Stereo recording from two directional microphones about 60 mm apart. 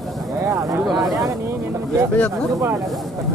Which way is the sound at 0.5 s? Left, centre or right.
Right.